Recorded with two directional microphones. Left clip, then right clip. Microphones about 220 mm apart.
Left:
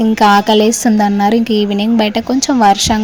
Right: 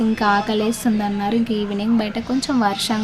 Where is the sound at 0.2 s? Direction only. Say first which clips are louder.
Left 11 dB; 30° left (ahead or behind).